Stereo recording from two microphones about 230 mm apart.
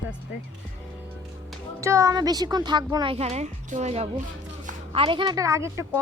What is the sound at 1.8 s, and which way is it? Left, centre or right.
A woman's voice, centre.